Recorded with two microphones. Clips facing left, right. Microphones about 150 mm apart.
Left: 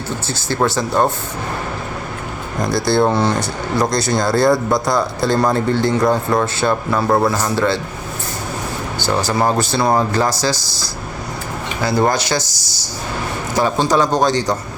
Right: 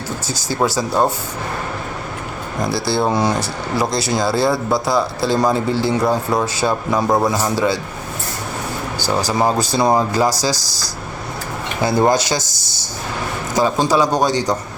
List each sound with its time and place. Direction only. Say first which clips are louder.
0.3 s speech: left 1 dB; 10° right (ahead or behind)
2.6 s speech: left 3 dB; 5° right (ahead or behind)
9.0 s speech: even; 10° right (ahead or behind)
10.5 s speech: even; 40° right (ahead or behind)
11.8 s speech: right 1 dB; 20° right (ahead or behind)
12.4 s speech: left 2 dB; 50° right (ahead or behind)
13.6 s speech: even; 15° right (ahead or behind)